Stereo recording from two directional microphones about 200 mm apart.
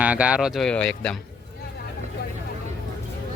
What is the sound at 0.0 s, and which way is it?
A man's voice, 5° right (ahead or behind).